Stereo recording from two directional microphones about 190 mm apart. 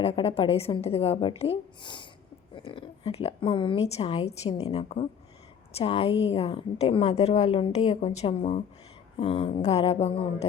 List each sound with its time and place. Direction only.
0.0 s a woman's voice: 30° left (ahead or behind)